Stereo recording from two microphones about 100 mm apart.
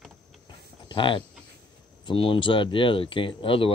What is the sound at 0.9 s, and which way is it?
Speech, 55° left (ahead or behind).